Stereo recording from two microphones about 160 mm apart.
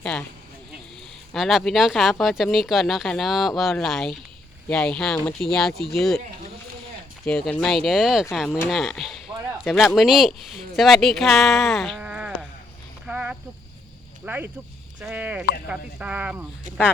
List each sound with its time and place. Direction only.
0.0 s speech: 10° left (ahead or behind)
1.3 s speech: centre (ahead or behind)
7.3 s speech: 5° left (ahead or behind)
10.8 s a sound: centre (ahead or behind)
14.3 s speech: 10° right (ahead or behind)